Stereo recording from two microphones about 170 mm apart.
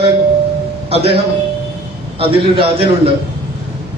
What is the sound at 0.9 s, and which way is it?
A man's voice, 35° right (ahead or behind).